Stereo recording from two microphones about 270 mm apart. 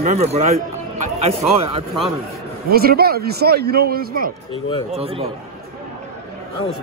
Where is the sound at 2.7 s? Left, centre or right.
Right.